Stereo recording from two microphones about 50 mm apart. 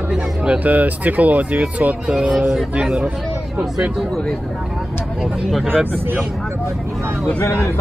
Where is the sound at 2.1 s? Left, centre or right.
Right.